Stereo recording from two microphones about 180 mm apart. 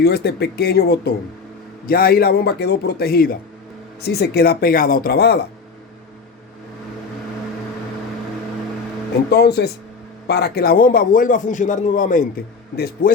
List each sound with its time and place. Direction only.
0.0 s a man's voice: 60° left (ahead or behind)
9.3 s a man's voice: 65° left (ahead or behind)